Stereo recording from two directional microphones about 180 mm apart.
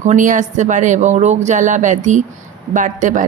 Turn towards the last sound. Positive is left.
turn(degrees=-45)  # may be behind; listen again after turning